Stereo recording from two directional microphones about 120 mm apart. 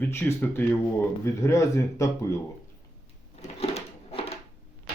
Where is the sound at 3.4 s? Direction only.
60° left (ahead or behind).